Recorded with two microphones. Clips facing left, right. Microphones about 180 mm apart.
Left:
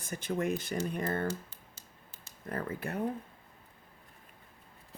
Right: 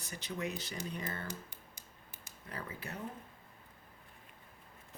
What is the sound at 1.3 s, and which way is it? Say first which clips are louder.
Computer keyboard: left 7 dB; 15° right (ahead or behind).